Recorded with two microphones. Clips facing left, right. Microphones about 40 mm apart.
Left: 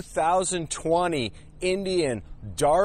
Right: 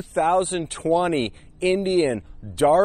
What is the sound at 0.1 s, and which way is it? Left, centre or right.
A man's voice, right.